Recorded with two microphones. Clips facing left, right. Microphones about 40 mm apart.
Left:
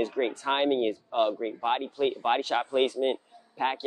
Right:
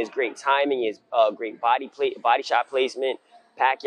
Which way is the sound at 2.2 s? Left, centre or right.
Right.